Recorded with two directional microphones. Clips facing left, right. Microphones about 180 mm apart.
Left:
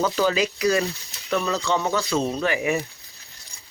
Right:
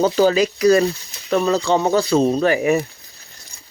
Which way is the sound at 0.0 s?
35° right (ahead or behind).